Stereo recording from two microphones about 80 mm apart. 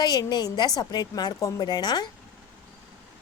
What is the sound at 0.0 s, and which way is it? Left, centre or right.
Speech, left.